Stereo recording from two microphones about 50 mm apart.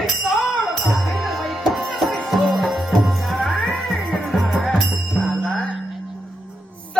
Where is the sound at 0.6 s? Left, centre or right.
Centre.